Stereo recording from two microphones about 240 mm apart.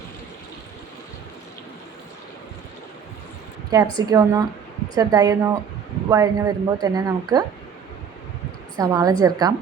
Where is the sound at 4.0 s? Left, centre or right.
Centre.